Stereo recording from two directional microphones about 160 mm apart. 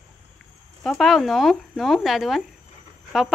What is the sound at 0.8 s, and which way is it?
Speech, centre (ahead or behind).